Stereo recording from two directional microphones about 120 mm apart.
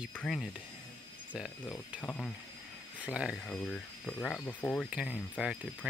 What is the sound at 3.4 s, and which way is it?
Speech, 5° left (ahead or behind).